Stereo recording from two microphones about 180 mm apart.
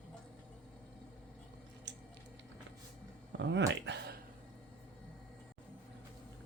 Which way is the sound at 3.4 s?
80° right.